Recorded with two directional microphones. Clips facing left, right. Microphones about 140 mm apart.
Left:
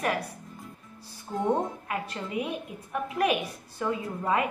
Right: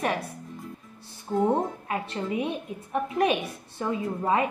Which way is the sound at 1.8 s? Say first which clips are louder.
Right 4 dB; 25° right (ahead or behind).